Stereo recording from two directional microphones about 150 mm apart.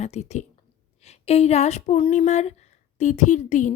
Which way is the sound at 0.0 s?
45° left (ahead or behind).